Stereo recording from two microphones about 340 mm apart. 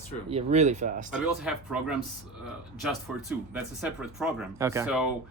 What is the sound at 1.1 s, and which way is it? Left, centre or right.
Speech, centre.